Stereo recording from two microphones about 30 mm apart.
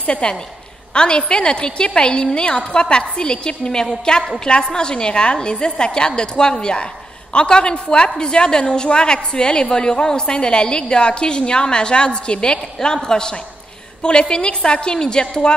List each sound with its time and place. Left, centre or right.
0.0 s a woman's voice: left